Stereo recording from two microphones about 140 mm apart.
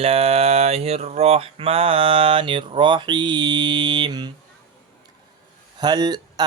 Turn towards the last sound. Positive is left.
turn(degrees=-30)  # may be behind; listen again after turning